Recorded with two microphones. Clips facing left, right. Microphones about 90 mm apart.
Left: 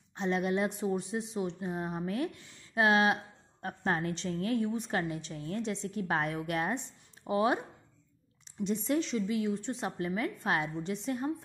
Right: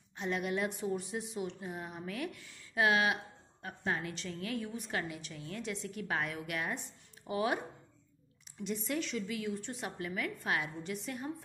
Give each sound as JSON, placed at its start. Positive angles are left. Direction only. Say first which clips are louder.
{"t": 0.1, "sound": "a woman's voice", "louder": "left 4 dB", "side_deg": 30}
{"t": 8.6, "sound": "a woman's voice", "louder": "left 6 dB", "side_deg": 30}